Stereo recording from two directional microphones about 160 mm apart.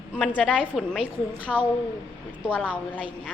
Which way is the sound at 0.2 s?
5° left (ahead or behind).